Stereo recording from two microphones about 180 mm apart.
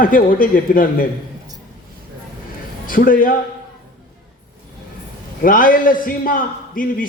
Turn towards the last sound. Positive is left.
turn(degrees=50)  # may be behind; listen again after turning